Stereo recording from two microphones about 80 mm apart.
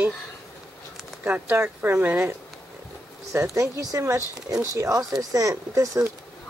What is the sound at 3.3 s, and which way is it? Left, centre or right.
Speech, right.